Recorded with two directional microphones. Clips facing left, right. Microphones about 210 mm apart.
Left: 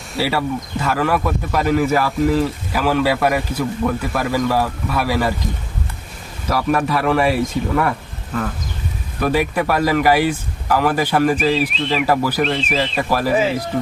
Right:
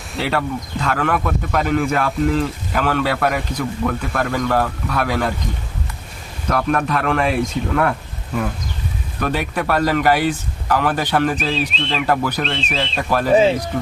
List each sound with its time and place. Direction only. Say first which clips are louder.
0.2 s a man's voice: left 1 dB; 10° left (ahead or behind)
6.5 s a man's voice: left 1 dB; 5° left (ahead or behind)
9.2 s a man's voice: left 3 dB; 10° left (ahead or behind)